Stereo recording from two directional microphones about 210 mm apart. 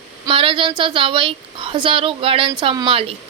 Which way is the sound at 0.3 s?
25° right (ahead or behind).